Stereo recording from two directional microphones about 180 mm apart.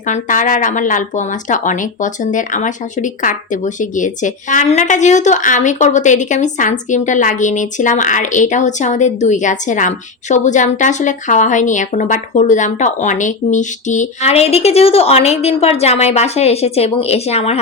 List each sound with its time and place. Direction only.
0.1 s speech: 45° left (ahead or behind)